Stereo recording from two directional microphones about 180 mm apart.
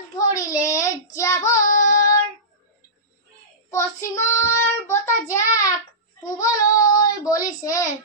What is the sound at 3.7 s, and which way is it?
Child singing, 15° left (ahead or behind).